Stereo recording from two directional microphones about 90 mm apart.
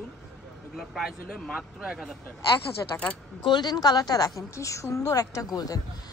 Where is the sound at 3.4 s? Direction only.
55° left (ahead or behind).